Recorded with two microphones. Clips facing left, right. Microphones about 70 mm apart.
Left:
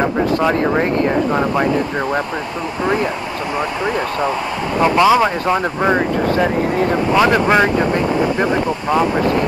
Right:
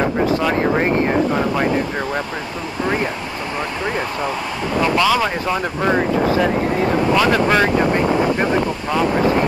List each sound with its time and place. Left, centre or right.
4.8 s speech: left
7.2 s speech: centre